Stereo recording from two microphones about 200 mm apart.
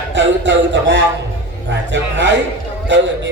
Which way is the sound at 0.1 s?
65° right (ahead or behind).